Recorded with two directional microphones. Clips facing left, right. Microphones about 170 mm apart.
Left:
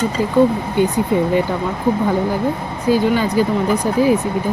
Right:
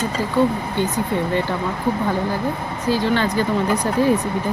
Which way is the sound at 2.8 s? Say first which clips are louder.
Left 4 dB; 15° left (ahead or behind).